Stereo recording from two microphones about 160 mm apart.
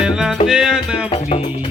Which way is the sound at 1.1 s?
40° left (ahead or behind).